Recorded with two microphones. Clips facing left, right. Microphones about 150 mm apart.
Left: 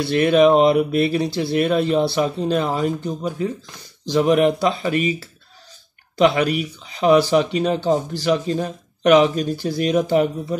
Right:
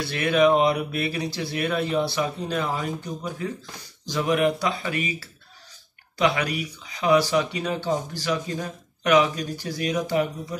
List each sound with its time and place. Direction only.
0.0 s speech: 30° left (ahead or behind)